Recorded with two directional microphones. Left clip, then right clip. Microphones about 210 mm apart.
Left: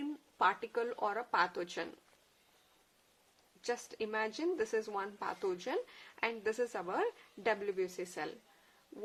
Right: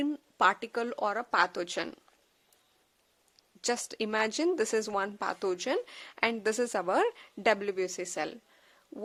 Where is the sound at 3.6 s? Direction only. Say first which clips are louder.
Right 6 dB; 55° right (ahead or behind).